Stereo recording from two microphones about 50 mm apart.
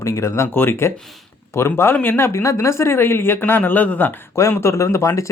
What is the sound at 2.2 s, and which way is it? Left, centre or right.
Speech, left.